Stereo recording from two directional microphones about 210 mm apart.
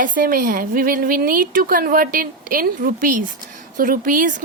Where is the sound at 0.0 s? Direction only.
40° right (ahead or behind).